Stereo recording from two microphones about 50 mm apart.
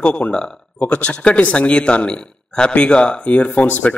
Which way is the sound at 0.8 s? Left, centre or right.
Left.